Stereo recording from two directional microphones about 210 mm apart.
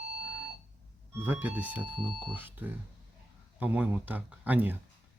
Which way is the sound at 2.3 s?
10° right (ahead or behind).